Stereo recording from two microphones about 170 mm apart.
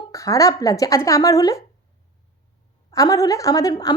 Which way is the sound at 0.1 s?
20° left (ahead or behind).